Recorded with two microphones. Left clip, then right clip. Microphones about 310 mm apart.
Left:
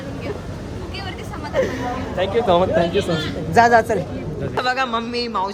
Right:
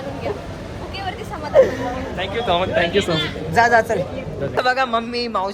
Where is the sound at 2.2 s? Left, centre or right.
Left.